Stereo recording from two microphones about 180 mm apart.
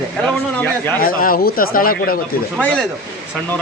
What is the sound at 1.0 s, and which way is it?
Speech, 50° left (ahead or behind).